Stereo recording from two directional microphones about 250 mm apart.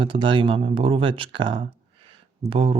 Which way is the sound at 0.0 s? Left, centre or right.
Centre.